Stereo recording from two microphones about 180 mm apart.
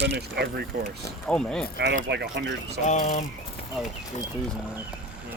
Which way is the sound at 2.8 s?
45° left (ahead or behind).